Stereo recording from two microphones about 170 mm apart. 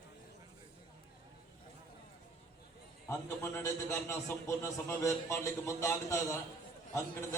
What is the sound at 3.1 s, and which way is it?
A man's voice, 15° left (ahead or behind).